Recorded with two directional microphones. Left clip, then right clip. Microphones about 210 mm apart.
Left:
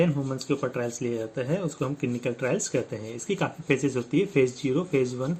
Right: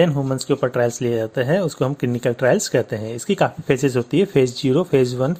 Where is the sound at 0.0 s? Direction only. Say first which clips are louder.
Right 8 dB; 50° right (ahead or behind).